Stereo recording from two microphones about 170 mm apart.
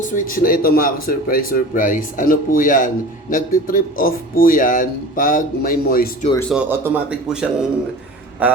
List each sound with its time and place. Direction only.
0.0 s speech: 55° left (ahead or behind)
6.5 s speech: 10° right (ahead or behind)